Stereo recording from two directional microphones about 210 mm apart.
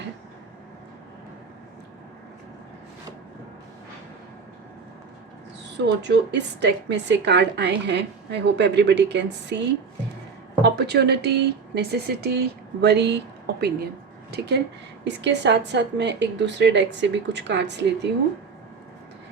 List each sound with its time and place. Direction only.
5.6 s a woman's voice: 55° right (ahead or behind)